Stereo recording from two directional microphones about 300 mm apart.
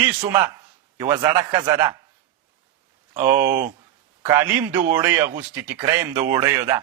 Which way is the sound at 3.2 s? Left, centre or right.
Centre.